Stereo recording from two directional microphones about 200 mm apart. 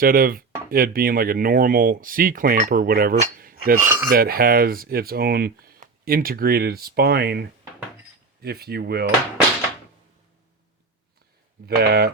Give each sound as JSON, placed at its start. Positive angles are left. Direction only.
{"t": 0.0, "sound": "speech", "side_deg": -45}
{"t": 3.8, "sound": "speech", "side_deg": -10}
{"t": 4.1, "sound": "speech", "side_deg": -50}
{"t": 11.6, "sound": "speech", "side_deg": -55}